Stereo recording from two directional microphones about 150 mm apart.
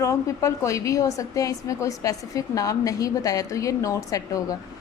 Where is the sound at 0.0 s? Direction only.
20° left (ahead or behind).